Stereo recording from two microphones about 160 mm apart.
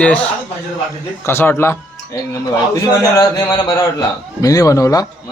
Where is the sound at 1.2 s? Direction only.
15° left (ahead or behind).